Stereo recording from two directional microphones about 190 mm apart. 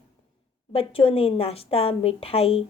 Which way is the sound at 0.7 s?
30° left (ahead or behind).